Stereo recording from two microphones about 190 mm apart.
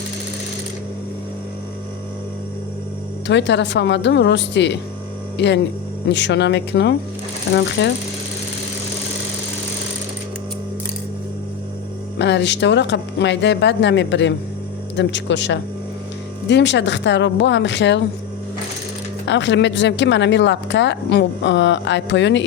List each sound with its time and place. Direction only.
3.2 s speech: 65° left (ahead or behind)
12.2 s speech: 65° left (ahead or behind)
19.2 s speech: 70° left (ahead or behind)